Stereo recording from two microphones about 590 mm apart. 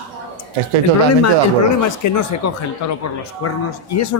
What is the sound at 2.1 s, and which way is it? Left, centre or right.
Speech, left.